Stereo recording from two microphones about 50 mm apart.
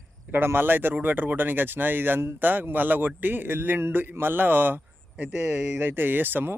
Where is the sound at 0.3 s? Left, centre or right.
Right.